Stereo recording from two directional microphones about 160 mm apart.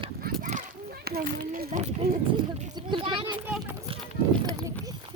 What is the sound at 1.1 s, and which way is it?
Speech, 70° right (ahead or behind).